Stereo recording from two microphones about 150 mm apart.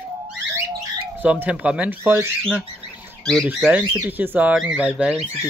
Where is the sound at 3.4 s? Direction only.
10° right (ahead or behind).